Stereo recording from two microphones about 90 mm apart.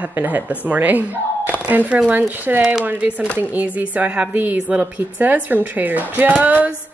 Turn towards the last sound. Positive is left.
turn(degrees=-15)  # may be behind; listen again after turning